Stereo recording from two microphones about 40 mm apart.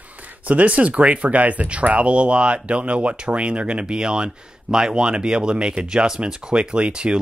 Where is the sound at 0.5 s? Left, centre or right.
Right.